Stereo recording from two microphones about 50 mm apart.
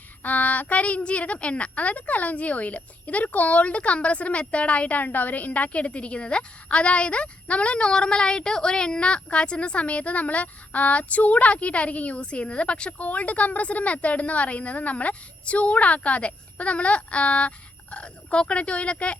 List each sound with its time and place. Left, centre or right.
0.2 s a woman's voice: left